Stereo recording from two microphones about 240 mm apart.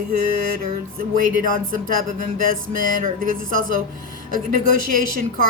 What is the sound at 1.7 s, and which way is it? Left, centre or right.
A woman's voice, right.